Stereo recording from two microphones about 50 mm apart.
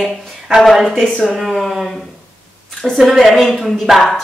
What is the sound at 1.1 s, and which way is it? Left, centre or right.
Speech, centre.